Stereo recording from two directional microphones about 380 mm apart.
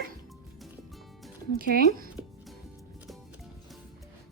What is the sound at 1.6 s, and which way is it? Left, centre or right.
Speech, right.